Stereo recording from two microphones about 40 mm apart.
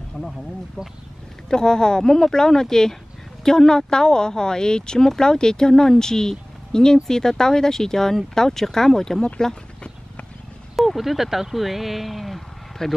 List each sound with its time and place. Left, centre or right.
0.2 s speech: left
10.8 s speech: centre